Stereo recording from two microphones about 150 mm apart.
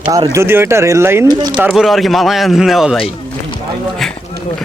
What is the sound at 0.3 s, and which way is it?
Speech, 15° right (ahead or behind).